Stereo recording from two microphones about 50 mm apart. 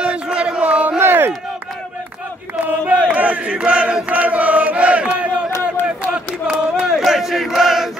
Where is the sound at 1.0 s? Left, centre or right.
Right.